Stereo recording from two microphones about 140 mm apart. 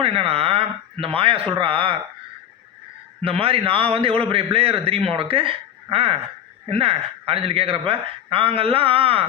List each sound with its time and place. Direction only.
0.0 s speech: 40° right (ahead or behind)
3.2 s a man's voice: 40° right (ahead or behind)